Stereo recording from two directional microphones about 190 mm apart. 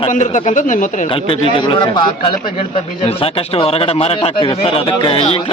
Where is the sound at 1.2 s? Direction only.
25° left (ahead or behind).